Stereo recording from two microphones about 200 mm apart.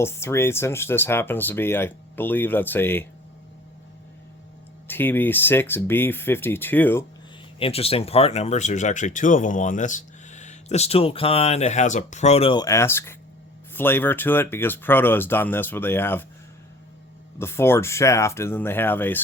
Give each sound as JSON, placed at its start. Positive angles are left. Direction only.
{"t": 0.0, "sound": "speech", "side_deg": 10}
{"t": 4.9, "sound": "speech", "side_deg": 10}
{"t": 7.6, "sound": "speech", "side_deg": 30}
{"t": 17.3, "sound": "speech", "side_deg": 10}